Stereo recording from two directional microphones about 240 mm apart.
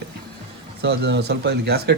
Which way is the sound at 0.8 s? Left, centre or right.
Right.